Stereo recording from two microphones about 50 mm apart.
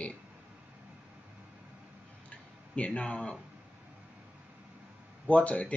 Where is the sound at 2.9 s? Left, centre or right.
Centre.